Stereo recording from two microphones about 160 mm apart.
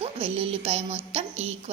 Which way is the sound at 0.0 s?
35° right (ahead or behind).